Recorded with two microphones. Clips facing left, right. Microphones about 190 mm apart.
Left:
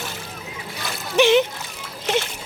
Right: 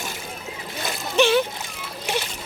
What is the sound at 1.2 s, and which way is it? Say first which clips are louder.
Splash: left 3 dB; 20° left (ahead or behind).